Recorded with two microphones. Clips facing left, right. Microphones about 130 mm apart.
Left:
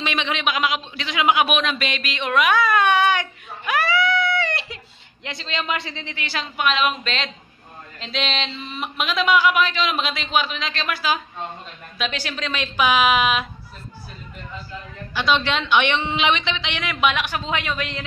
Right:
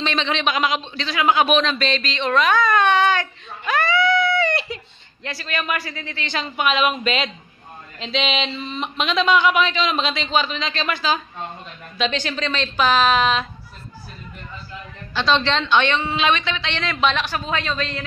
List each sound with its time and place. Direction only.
0.0 s speech: 10° left (ahead or behind)
5.2 s a man's voice: 20° left (ahead or behind)
6.2 s a woman's voice: centre (ahead or behind)
15.1 s a woman's voice: 10° left (ahead or behind)